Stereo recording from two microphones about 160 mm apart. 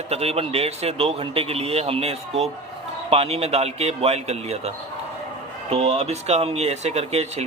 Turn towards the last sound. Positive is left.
turn(degrees=-40)  # may be behind; listen again after turning